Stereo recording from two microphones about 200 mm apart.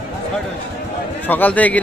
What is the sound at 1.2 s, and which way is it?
Speech, 10° left (ahead or behind).